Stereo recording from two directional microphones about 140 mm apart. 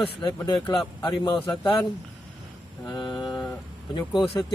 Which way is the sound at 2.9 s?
30° left (ahead or behind).